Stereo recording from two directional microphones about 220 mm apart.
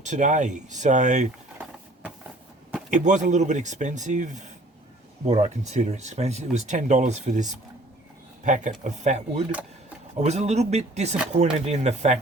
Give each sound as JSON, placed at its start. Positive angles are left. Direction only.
{"t": 0.0, "sound": "speech", "side_deg": -35}
{"t": 2.9, "sound": "speech", "side_deg": -35}
{"t": 8.4, "sound": "speech", "side_deg": -35}